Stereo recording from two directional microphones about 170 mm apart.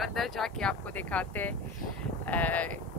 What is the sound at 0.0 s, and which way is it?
Speech, centre (ahead or behind).